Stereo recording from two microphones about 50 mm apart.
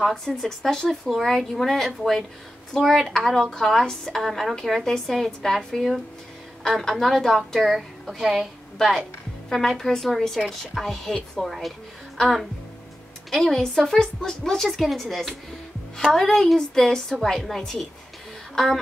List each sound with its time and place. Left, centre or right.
0.4 s a woman's voice: centre